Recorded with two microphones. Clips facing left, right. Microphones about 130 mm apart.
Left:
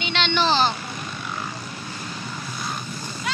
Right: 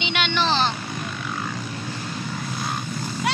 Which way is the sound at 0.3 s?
Centre (ahead or behind).